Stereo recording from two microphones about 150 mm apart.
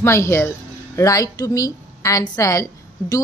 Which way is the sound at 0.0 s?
20° left (ahead or behind).